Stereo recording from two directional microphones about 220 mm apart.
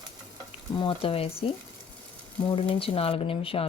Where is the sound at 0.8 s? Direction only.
25° left (ahead or behind).